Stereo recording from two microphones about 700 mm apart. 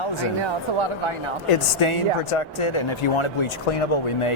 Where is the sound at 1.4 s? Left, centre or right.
Left.